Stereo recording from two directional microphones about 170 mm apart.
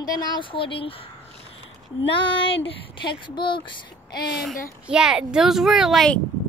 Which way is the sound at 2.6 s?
30° left (ahead or behind).